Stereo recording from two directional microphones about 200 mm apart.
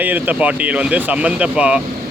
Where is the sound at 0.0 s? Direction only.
10° right (ahead or behind).